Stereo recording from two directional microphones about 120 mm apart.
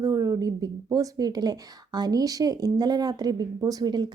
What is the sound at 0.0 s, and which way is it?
Speech, 30° right (ahead or behind).